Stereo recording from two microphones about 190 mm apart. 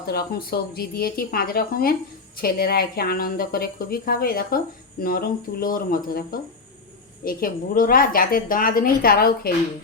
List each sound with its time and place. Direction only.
0.0 s speech: 55° left (ahead or behind)